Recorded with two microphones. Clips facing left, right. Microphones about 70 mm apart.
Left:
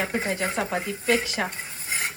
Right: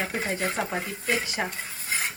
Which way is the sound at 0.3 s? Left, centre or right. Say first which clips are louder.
Left 2 dB; centre.